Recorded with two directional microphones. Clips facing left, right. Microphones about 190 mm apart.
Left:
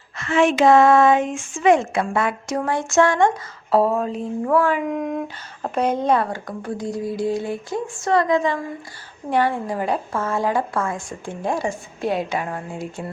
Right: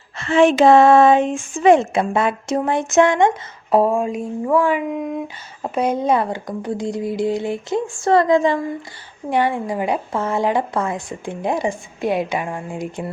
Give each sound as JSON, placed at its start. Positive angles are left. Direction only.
{"t": 0.2, "sound": "speech", "side_deg": -30}
{"t": 9.3, "sound": "a woman's voice", "side_deg": -15}